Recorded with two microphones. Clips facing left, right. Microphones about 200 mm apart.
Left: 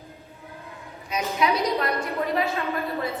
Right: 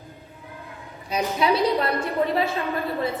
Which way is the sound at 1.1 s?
30° right (ahead or behind).